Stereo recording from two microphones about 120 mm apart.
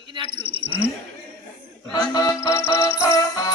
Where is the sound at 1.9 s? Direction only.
35° left (ahead or behind).